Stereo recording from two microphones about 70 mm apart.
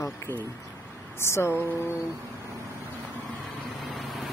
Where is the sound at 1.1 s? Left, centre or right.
Left.